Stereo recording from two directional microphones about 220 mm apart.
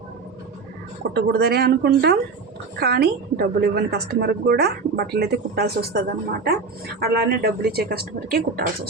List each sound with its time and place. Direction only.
1.1 s a woman's voice: 45° right (ahead or behind)